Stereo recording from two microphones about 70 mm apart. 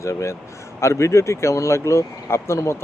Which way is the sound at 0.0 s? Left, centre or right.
Left.